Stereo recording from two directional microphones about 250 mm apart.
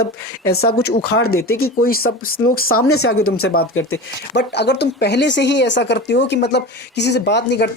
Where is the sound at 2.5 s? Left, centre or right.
Left.